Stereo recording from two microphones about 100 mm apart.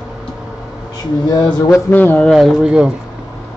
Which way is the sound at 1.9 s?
15° left (ahead or behind).